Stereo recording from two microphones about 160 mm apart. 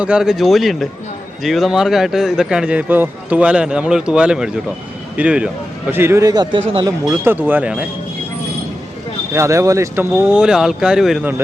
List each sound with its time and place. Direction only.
0.0 s a man's voice: 5° right (ahead or behind); by 6.9 s 30° right (ahead or behind)
7.1 s speech: 10° right (ahead or behind)
9.3 s speech: 20° right (ahead or behind)